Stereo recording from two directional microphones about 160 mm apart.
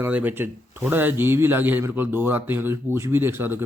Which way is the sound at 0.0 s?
10° right (ahead or behind).